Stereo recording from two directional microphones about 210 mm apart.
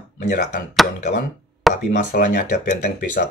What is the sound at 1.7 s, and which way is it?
Speech, 35° left (ahead or behind).